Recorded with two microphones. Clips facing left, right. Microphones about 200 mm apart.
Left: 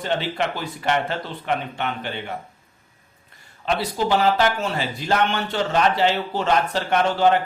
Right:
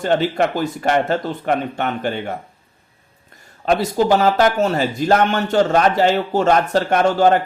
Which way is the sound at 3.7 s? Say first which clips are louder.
Right 6 dB; 45° right (ahead or behind).